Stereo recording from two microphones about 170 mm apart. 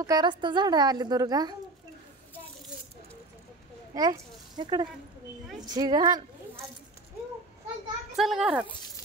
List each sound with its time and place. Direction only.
0.0 s a woman's voice: 25° right (ahead or behind)
3.9 s a child's voice: 20° right (ahead or behind)
8.2 s speech: centre (ahead or behind)